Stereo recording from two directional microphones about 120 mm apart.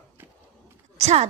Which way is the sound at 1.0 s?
65° right (ahead or behind).